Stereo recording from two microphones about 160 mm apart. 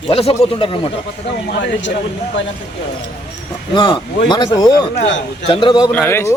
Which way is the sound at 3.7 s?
30° left (ahead or behind).